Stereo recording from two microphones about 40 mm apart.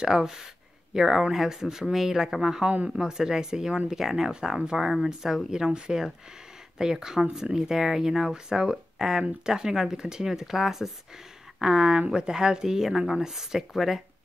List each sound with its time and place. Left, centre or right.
0.0 s speech: centre
5.7 s speech: right